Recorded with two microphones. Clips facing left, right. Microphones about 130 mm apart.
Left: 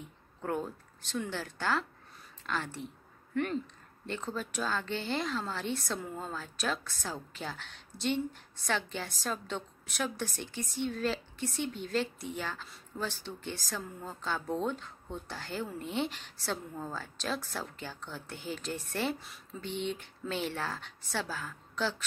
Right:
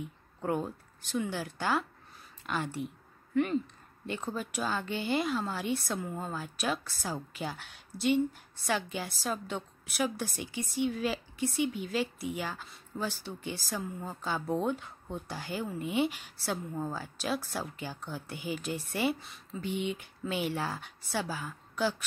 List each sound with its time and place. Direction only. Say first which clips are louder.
0.4 s speech: right 2 dB; 15° right (ahead or behind)
4.0 s speech: right 1 dB; 10° right (ahead or behind)
19.1 s speech: right 3 dB; centre (ahead or behind)